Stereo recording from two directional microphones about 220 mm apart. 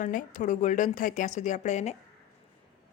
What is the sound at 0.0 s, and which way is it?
A woman's voice, 35° left (ahead or behind).